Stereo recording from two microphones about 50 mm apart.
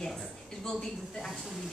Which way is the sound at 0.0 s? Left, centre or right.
Centre.